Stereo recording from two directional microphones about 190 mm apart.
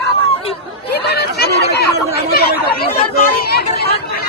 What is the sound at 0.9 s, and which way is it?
Speech, 60° left (ahead or behind).